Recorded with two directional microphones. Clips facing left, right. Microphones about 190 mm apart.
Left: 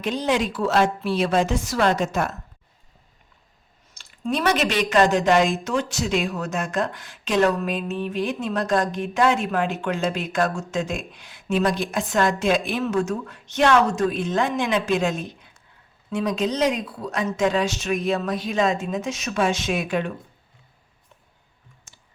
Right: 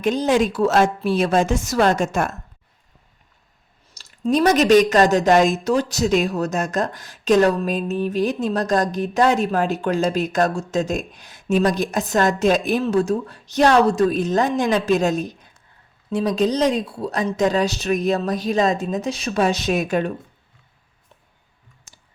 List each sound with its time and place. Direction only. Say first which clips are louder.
0.0 s a woman's voice: right 5 dB; 45° right (ahead or behind)
3.9 s speech: right 6 dB; 40° right (ahead or behind)